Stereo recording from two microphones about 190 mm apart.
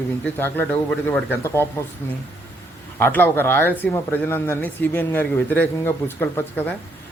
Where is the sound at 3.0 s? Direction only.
10° left (ahead or behind).